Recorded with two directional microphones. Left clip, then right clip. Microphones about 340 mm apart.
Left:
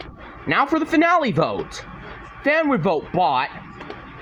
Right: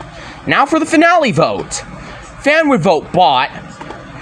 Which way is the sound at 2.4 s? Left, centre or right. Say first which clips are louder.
Right 7 dB; left.